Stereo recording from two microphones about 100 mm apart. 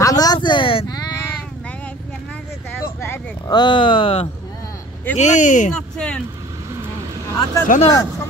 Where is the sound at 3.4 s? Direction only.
50° left (ahead or behind).